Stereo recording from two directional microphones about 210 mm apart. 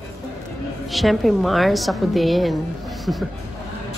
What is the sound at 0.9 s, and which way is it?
Speech, centre (ahead or behind).